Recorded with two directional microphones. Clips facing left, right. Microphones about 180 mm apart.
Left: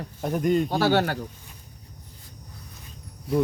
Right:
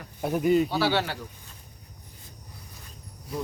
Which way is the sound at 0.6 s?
45° left (ahead or behind).